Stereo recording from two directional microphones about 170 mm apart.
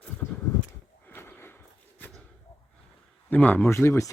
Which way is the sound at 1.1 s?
15° left (ahead or behind).